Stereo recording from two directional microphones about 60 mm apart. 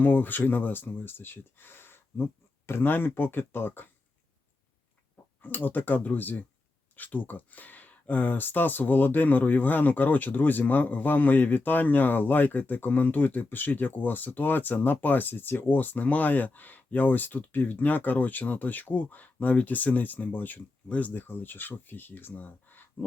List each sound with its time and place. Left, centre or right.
0.0 s speech: left
5.4 s speech: left